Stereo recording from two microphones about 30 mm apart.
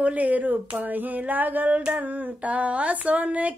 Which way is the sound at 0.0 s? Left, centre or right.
Right.